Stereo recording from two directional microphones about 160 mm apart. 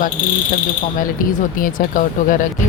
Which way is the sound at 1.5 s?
60° left (ahead or behind).